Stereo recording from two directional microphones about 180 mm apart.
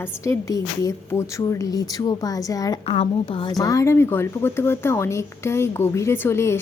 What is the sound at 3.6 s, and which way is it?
A woman's voice, 15° left (ahead or behind).